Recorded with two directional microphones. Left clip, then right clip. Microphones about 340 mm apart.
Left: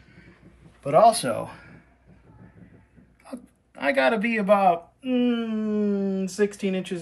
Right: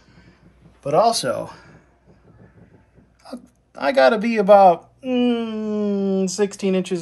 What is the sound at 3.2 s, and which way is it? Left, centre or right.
Speech, centre.